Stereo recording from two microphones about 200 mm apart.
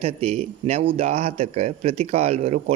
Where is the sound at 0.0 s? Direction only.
30° right (ahead or behind).